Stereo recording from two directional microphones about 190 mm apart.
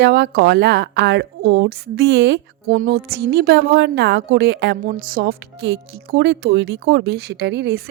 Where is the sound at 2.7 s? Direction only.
50° right (ahead or behind).